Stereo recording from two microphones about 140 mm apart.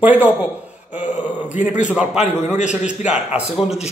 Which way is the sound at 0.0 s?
10° right (ahead or behind).